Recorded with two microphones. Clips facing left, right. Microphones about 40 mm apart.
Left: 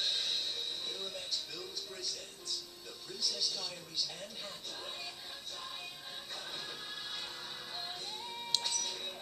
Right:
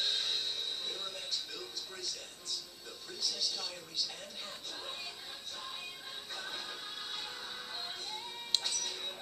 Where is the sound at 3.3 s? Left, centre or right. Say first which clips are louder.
Even; right.